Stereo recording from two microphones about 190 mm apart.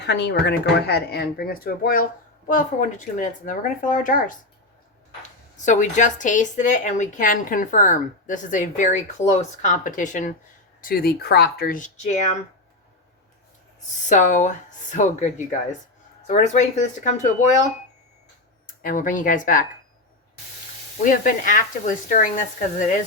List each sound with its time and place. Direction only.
0.0 s speech: 65° left (ahead or behind); by 4.4 s 45° left (ahead or behind)
5.5 s a woman's voice: 40° left (ahead or behind)
14.1 s a woman's voice: 40° left (ahead or behind)
21.0 s speech: 45° left (ahead or behind)